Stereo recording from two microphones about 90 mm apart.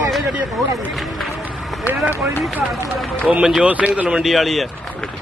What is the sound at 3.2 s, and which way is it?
A man's voice, 15° right (ahead or behind).